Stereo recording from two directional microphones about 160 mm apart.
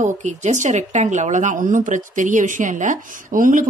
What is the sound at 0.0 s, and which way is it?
A woman's voice, 50° right (ahead or behind).